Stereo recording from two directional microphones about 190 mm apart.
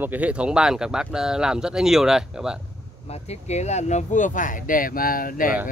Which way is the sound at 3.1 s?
35° left (ahead or behind).